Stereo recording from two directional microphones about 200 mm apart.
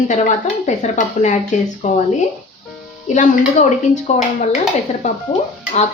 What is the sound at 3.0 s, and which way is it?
Speech, 35° left (ahead or behind).